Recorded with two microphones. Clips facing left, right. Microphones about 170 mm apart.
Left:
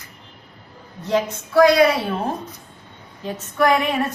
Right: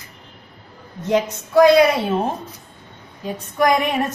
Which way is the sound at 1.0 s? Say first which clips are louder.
Right 2 dB; 20° right (ahead or behind).